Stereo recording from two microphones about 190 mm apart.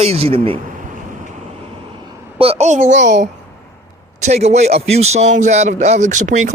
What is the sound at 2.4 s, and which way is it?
Speech, 35° right (ahead or behind).